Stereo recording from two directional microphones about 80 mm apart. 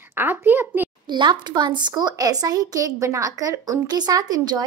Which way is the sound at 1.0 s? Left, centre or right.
Right.